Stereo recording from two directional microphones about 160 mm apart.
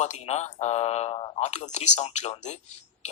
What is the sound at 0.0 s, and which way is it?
Speech, 45° left (ahead or behind).